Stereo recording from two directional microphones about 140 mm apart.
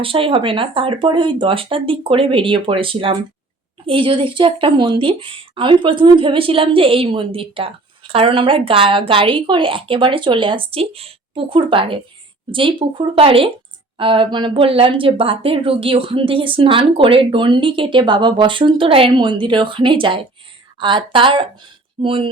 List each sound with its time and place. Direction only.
0.0 s a woman's voice: 40° right (ahead or behind)